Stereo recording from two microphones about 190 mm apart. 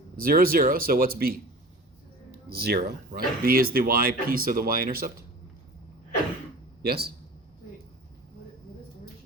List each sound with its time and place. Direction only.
0.2 s speech: 50° right (ahead or behind)
2.5 s speech: 55° right (ahead or behind)
6.8 s speech: 55° right (ahead or behind)